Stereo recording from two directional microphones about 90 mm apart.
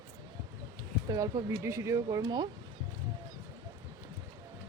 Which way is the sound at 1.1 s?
40° right (ahead or behind).